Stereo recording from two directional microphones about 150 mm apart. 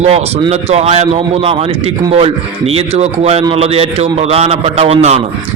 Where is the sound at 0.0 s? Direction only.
45° right (ahead or behind).